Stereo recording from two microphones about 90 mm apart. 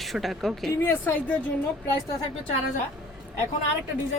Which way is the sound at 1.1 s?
25° left (ahead or behind).